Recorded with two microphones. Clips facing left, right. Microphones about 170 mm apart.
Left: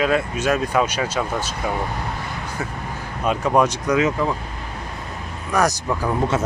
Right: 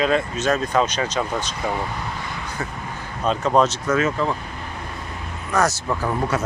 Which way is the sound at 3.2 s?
10° left (ahead or behind).